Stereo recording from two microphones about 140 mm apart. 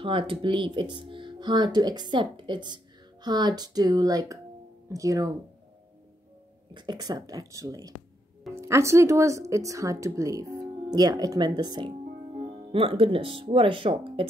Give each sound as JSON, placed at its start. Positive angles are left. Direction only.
{"t": 0.0, "sound": "speech", "side_deg": -35}
{"t": 6.7, "sound": "speech", "side_deg": -30}